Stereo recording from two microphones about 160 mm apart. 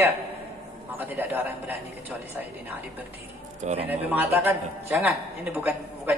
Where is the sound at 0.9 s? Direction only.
10° right (ahead or behind).